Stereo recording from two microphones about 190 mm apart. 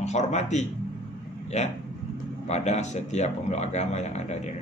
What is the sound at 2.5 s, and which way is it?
A man's voice, 35° left (ahead or behind).